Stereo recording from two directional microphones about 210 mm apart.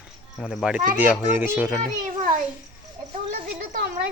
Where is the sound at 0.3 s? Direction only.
Centre (ahead or behind).